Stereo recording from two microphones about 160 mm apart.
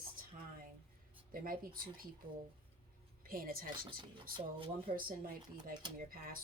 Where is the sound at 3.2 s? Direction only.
65° right (ahead or behind).